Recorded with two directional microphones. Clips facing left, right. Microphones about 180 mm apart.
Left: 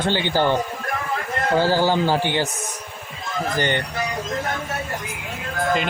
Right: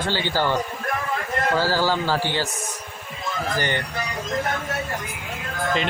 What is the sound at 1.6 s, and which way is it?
Speech, 20° left (ahead or behind).